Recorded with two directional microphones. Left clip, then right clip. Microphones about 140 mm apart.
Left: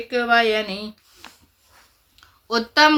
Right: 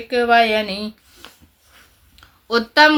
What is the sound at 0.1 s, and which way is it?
Speech, 35° right (ahead or behind).